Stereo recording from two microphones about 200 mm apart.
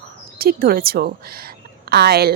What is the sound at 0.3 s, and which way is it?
Speech, 50° right (ahead or behind).